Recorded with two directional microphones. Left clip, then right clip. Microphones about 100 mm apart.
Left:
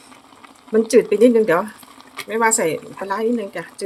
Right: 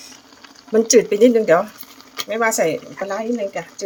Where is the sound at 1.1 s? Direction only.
15° left (ahead or behind).